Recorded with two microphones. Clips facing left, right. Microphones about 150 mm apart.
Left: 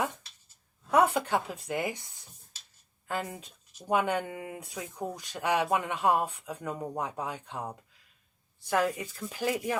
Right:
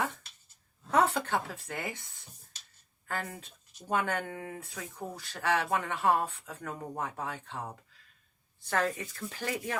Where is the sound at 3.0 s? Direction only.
15° left (ahead or behind).